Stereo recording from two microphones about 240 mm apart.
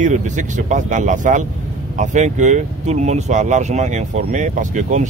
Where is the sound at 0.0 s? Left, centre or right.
Right.